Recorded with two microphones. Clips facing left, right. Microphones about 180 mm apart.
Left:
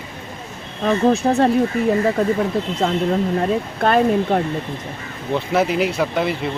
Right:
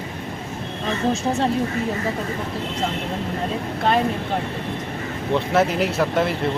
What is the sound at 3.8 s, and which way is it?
Speech, 55° left (ahead or behind).